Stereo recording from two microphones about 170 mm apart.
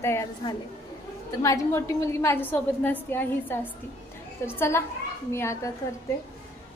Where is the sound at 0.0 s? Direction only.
15° left (ahead or behind).